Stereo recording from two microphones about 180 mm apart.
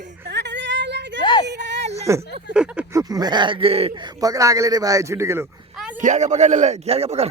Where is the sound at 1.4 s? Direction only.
70° right (ahead or behind).